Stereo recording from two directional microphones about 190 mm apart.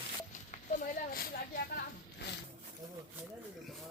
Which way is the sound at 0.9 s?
50° left (ahead or behind).